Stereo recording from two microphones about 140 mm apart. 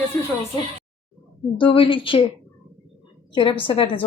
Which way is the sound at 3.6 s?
40° left (ahead or behind).